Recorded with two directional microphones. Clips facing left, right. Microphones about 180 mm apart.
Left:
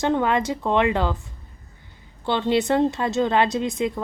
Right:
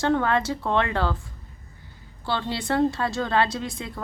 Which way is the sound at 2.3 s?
20° left (ahead or behind).